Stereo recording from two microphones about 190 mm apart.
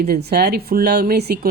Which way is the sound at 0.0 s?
55° right (ahead or behind).